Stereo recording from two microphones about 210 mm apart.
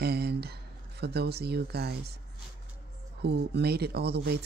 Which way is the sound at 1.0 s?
50° right (ahead or behind).